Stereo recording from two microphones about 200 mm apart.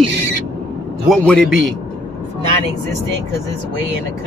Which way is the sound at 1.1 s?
Centre (ahead or behind).